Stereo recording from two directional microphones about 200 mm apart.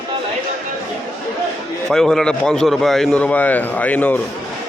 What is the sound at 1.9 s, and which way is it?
A man's voice, centre (ahead or behind).